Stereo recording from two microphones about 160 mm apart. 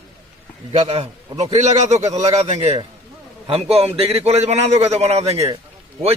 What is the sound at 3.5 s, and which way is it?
A man's voice, 40° right (ahead or behind).